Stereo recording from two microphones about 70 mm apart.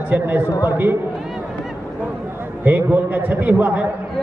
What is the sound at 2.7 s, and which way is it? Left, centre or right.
A man's voice, right.